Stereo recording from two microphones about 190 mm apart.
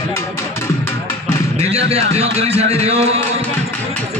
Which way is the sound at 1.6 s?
35° right (ahead or behind).